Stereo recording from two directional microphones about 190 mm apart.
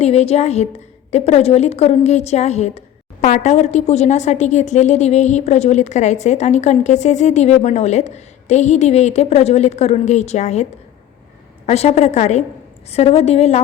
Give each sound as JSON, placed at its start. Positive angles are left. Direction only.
{"t": 0.0, "sound": "a woman's voice", "side_deg": 30}